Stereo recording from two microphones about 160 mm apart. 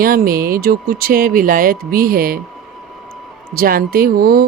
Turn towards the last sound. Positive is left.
turn(degrees=-70)  # may be behind; listen again after turning